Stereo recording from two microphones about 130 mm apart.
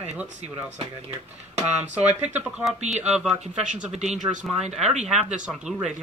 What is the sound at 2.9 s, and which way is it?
Speech, 5° right (ahead or behind).